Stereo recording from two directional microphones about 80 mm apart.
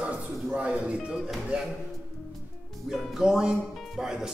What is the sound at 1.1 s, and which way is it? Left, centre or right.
Music, centre.